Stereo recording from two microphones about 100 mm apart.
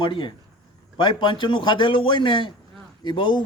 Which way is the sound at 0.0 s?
55° left (ahead or behind).